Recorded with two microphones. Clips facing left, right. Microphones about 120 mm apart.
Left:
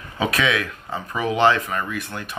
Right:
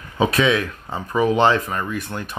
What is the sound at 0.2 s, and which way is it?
Speech, 30° right (ahead or behind).